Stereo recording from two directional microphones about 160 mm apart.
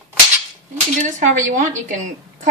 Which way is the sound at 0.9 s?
50° right (ahead or behind).